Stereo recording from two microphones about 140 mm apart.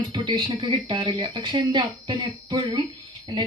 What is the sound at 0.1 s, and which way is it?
A woman's voice, 30° right (ahead or behind).